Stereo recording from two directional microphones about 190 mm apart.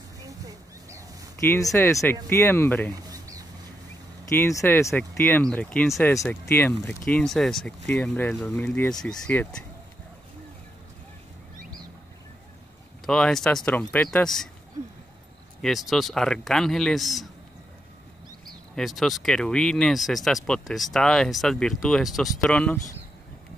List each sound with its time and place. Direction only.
1.5 s speech: 15° left (ahead or behind)
2.9 s a sound: 20° right (ahead or behind)
4.4 s speech: 15° left (ahead or behind)
13.0 s speech: 5° left (ahead or behind)
15.6 s speech: centre (ahead or behind)
18.8 s speech: centre (ahead or behind)